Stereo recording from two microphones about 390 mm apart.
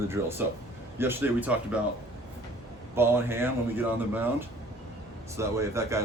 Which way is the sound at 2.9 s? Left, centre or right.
Centre.